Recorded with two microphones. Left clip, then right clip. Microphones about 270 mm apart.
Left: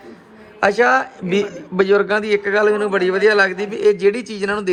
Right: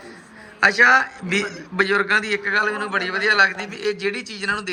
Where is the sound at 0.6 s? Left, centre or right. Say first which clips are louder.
Even; centre.